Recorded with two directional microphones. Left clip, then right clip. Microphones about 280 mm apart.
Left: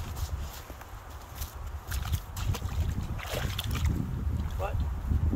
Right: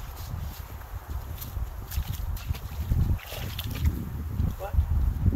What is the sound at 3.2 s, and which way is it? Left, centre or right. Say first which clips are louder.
Boat: left 3 dB; centre.